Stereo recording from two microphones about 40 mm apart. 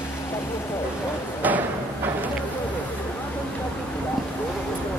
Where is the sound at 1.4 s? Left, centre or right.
Right.